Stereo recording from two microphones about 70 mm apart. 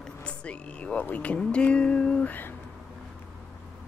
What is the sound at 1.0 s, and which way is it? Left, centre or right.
Speech, left.